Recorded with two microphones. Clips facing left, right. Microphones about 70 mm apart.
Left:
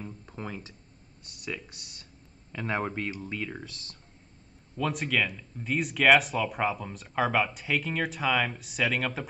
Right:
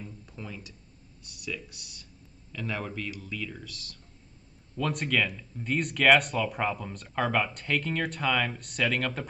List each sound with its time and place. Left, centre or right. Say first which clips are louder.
0.0 s music: left 4 dB; left
1.2 s speech: even; left
4.7 s speech: even; centre